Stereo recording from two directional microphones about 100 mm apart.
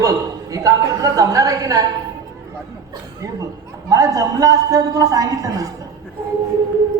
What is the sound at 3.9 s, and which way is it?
A man's voice, 35° right (ahead or behind).